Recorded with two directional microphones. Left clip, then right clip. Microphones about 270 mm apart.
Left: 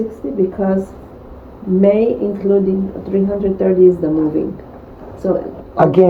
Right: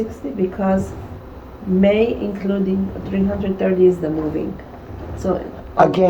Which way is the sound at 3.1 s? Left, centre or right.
Right.